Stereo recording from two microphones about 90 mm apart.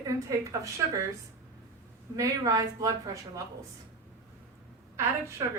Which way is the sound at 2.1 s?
40° right (ahead or behind).